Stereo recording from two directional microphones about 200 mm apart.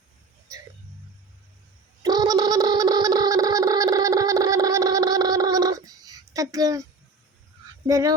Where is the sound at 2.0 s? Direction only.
20° right (ahead or behind).